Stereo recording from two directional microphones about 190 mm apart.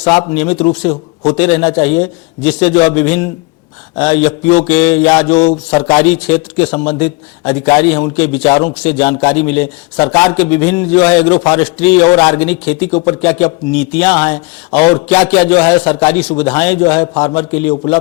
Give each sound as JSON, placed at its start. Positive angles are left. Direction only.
{"t": 0.0, "sound": "a man's voice", "side_deg": 10}
{"t": 5.3, "sound": "a sound", "side_deg": 40}
{"t": 5.9, "sound": "a man's voice", "side_deg": 10}